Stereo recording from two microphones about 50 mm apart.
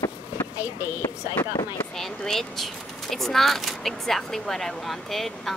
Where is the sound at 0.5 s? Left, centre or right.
Right.